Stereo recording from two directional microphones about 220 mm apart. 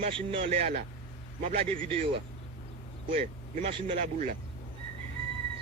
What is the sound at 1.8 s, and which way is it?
Speech, 25° right (ahead or behind).